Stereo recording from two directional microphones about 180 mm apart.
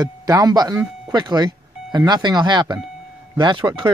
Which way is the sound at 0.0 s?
20° right (ahead or behind).